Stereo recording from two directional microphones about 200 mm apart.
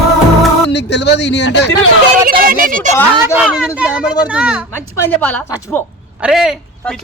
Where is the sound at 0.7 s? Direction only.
60° left (ahead or behind).